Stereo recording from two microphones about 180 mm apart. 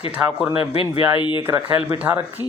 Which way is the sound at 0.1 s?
10° right (ahead or behind).